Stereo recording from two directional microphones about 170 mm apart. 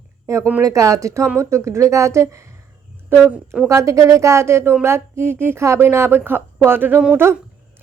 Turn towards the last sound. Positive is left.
turn(degrees=-10)  # may be behind; listen again after turning